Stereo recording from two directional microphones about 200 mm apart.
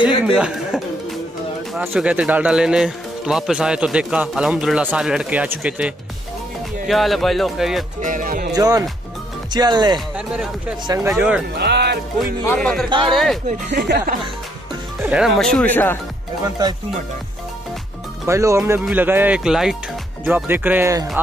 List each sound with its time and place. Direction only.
0.2 s speech: 5° right (ahead or behind)
8.0 s speech: 40° right (ahead or behind)
8.5 s speech: 20° right (ahead or behind)
9.9 s speech: 5° right (ahead or behind)
11.5 s speech: 55° right (ahead or behind)
12.4 s speech: 5° left (ahead or behind)
13.7 s speech: 55° right (ahead or behind)
15.0 s speech: 5° right (ahead or behind); by 16.0 s 10° left (ahead or behind)
16.6 s speech: 20° right (ahead or behind)
18.2 s speech: 15° right (ahead or behind)